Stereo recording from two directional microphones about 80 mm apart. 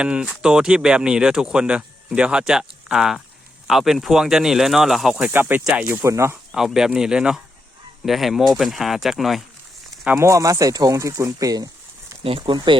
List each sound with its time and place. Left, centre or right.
0.0 s speech: centre
5.3 s speech: right
6.1 s speech: right
6.5 s speech: centre
10.2 s speech: right
12.5 s speech: right